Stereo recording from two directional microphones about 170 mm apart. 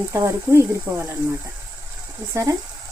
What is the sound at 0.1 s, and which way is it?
Speech, 15° right (ahead or behind).